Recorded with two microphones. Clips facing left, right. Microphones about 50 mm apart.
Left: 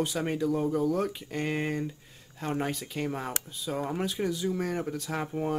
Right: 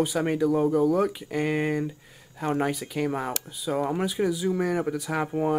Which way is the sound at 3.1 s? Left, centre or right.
Centre.